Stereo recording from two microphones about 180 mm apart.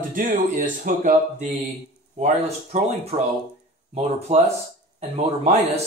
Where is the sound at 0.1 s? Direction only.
50° right (ahead or behind).